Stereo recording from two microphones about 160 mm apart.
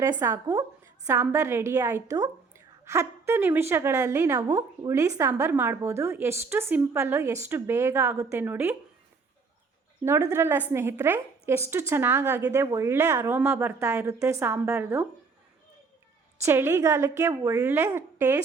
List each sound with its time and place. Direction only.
0.0 s a woman's voice: 20° right (ahead or behind)
10.0 s a woman's voice: 15° right (ahead or behind)
16.4 s a woman's voice: 15° right (ahead or behind)